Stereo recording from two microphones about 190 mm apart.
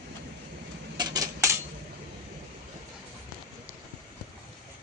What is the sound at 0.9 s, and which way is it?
Cutlery, 20° right (ahead or behind).